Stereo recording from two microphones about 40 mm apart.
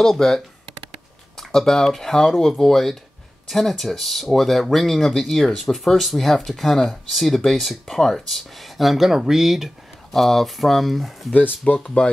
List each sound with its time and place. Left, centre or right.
0.0 s speech: centre
1.3 s a sound: centre
2.0 s speech: centre
10.1 s speech: centre
11.8 s speech: left